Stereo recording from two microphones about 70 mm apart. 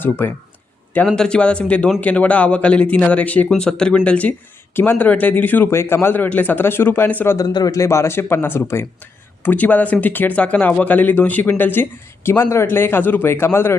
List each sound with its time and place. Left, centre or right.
0.0 s speech: left
1.0 s speech: centre
3.5 s speech: centre; by 5.6 s left
5.7 s speech: left
7.3 s speech: left
9.4 s speech: left